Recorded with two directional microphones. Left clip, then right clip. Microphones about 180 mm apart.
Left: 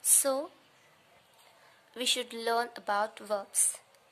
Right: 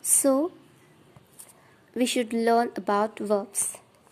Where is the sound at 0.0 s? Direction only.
20° left (ahead or behind).